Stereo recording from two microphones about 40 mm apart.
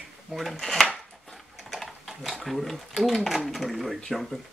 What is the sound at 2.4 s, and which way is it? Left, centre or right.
Speech, centre.